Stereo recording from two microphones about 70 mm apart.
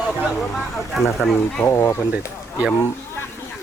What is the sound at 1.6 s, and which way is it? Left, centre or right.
Speech, left.